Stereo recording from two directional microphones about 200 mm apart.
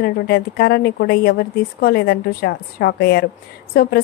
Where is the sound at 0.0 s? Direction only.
50° left (ahead or behind).